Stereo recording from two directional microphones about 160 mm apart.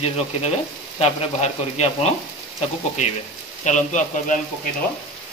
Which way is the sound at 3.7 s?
50° left (ahead or behind).